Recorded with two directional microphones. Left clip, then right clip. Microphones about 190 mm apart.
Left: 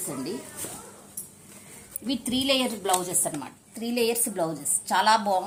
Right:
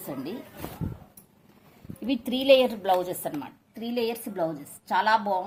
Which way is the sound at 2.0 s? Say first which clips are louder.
Right 5 dB; 30° right (ahead or behind).